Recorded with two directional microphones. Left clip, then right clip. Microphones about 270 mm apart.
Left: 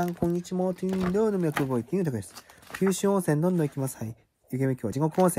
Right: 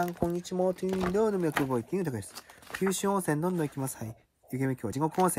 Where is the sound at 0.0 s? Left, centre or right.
Centre.